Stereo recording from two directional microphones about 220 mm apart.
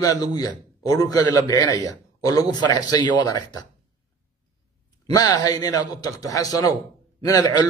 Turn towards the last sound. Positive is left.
turn(degrees=20)  # may be behind; listen again after turning